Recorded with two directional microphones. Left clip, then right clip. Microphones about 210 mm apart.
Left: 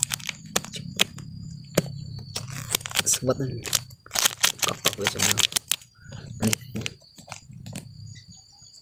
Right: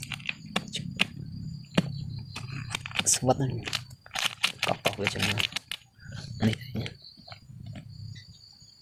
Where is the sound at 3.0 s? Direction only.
5° left (ahead or behind).